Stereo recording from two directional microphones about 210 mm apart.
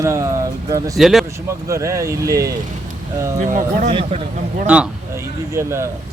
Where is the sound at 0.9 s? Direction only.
Centre (ahead or behind).